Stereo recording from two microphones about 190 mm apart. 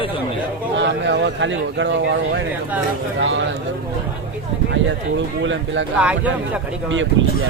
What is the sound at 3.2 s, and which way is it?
Speech, 80° right.